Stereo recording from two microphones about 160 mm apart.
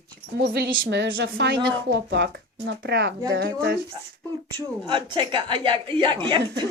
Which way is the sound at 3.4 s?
80° right.